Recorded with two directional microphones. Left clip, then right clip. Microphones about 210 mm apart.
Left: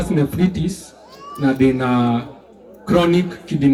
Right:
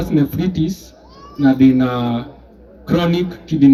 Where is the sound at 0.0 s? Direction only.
45° right (ahead or behind).